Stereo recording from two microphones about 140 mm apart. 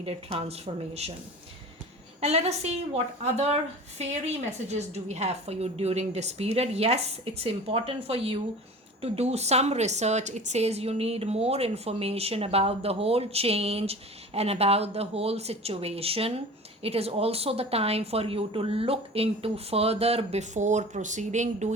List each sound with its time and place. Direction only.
0.0 s a woman's voice: 45° right (ahead or behind)
2.2 s a woman's voice: 50° right (ahead or behind)